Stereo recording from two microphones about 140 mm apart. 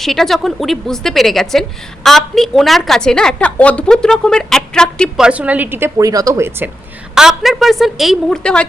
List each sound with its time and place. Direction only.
0.0 s a woman's voice: centre (ahead or behind)
5.2 s a woman's voice: 10° right (ahead or behind)
7.2 s a woman's voice: 5° right (ahead or behind)